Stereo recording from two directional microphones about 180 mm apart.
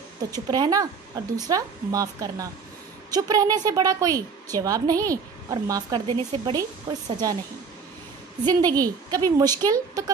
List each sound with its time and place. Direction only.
0.3 s a woman's voice: 20° right (ahead or behind)
8.5 s a woman's voice: 20° right (ahead or behind)